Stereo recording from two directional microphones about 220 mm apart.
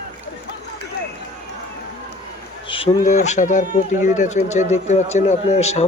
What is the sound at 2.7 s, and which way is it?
Speech, 25° left (ahead or behind).